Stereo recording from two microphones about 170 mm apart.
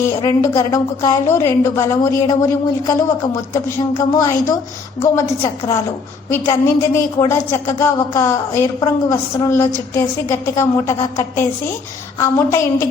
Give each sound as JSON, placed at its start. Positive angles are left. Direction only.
{"t": 0.0, "sound": "a woman's voice", "side_deg": 20}